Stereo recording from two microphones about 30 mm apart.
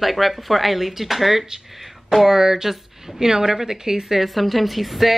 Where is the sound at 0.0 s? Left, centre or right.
Centre.